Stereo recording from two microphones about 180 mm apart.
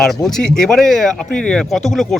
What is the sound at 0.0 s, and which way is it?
Speech, centre (ahead or behind).